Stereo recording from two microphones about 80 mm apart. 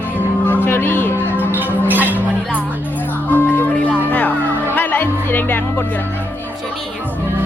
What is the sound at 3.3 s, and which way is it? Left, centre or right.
Music, left.